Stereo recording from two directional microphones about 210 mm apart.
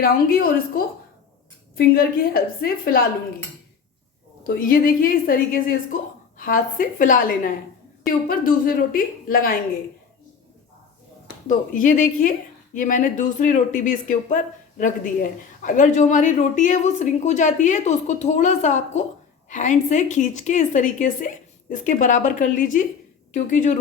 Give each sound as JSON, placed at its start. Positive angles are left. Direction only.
{"t": 0.0, "sound": "speech", "side_deg": 45}
{"t": 4.4, "sound": "speech", "side_deg": 45}
{"t": 11.4, "sound": "speech", "side_deg": 40}